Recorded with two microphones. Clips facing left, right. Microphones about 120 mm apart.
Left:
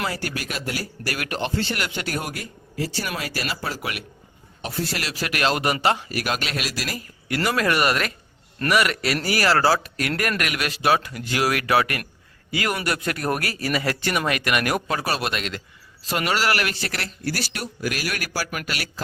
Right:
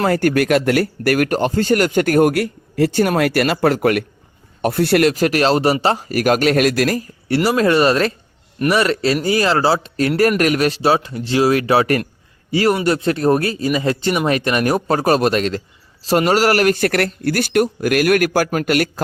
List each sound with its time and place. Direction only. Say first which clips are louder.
0.0 s speech: right 13 dB; 50° right (ahead or behind)
2.4 s speech: right 12 dB; 65° right (ahead or behind)
4.6 s speech: right 14 dB; 60° right (ahead or behind)
7.3 s speech: right 7 dB; 30° right (ahead or behind); by 19.0 s 50° right (ahead or behind)